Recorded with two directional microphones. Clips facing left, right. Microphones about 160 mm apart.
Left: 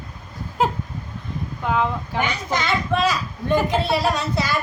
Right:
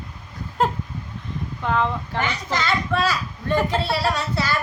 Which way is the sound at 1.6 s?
5° left (ahead or behind).